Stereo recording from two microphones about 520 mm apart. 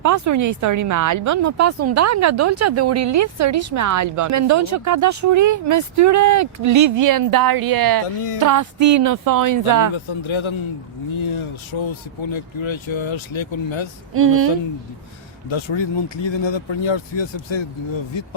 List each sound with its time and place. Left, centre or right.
0.0 s speech: right
9.9 s speech: left
14.1 s speech: right
15.4 s speech: left